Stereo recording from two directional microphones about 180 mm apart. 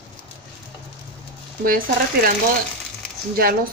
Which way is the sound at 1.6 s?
50° right (ahead or behind).